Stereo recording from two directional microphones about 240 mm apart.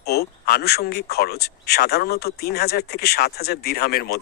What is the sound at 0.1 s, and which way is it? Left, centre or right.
Speech, left.